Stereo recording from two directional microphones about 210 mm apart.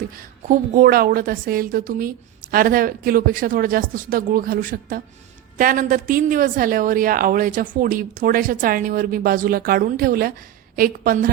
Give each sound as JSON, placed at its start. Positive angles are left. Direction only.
{"t": 0.4, "sound": "a woman's voice", "side_deg": -40}